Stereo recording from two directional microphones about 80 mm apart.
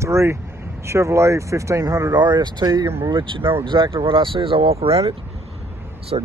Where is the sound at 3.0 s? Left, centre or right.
Right.